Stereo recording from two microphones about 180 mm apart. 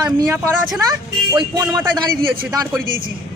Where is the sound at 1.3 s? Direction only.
20° right (ahead or behind).